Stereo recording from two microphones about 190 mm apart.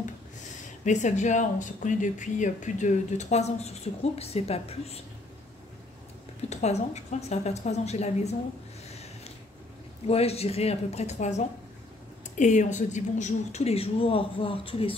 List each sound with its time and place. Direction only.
0.8 s speech: 40° left (ahead or behind)
6.5 s speech: 35° left (ahead or behind)
10.0 s speech: 35° left (ahead or behind)